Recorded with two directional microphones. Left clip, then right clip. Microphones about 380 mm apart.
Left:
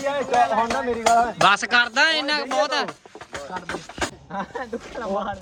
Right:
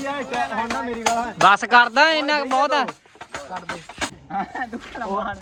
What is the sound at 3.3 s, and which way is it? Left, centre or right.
Music, centre.